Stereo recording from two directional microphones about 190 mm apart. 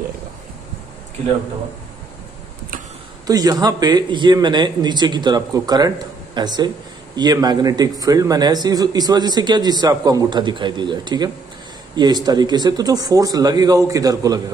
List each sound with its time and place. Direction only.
3.3 s speech: 20° right (ahead or behind)